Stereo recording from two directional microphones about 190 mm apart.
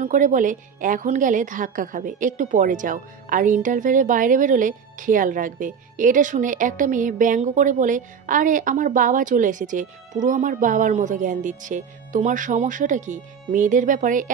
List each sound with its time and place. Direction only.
0.0 s a woman's voice: 45° right (ahead or behind)